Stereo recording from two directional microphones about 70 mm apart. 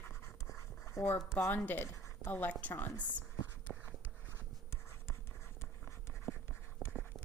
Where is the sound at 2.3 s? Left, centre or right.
Left.